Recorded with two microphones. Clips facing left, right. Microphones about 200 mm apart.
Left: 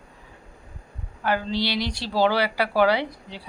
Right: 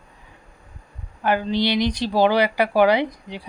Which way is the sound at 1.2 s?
20° right (ahead or behind).